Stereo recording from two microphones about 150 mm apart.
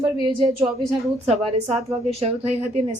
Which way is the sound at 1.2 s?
45° right (ahead or behind).